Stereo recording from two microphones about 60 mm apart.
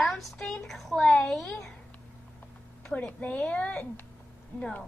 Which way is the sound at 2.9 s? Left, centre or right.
Centre.